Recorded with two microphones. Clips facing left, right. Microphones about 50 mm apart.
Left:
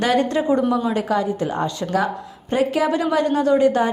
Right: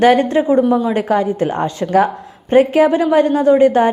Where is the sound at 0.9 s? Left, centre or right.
Right.